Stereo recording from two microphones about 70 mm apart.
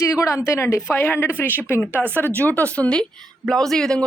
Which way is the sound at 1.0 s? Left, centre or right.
Left.